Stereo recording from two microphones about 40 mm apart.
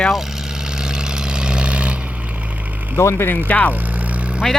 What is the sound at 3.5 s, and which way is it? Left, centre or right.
Speech, left.